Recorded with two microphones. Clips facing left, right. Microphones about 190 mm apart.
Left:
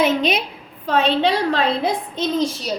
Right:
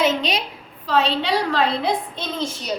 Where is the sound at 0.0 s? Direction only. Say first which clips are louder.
Left 3 dB; 55° left (ahead or behind).